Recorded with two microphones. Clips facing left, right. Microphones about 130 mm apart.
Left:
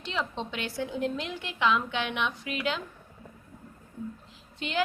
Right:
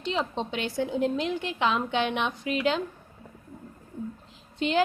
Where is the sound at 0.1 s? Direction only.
25° right (ahead or behind).